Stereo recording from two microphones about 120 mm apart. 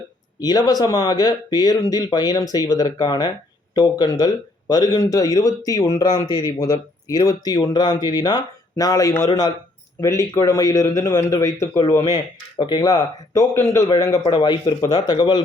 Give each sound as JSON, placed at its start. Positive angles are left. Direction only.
{"t": 0.3, "sound": "a man's voice", "side_deg": 35}
{"t": 12.1, "sound": "speech", "side_deg": 40}
{"t": 13.5, "sound": "a man's voice", "side_deg": 20}
{"t": 14.3, "sound": "speech", "side_deg": 40}